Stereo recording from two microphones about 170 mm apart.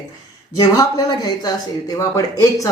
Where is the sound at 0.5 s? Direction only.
20° left (ahead or behind).